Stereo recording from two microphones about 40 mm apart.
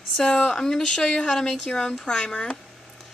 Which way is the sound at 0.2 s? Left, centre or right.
Centre.